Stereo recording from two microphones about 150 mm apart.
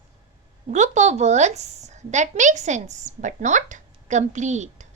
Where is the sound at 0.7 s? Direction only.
50° right (ahead or behind).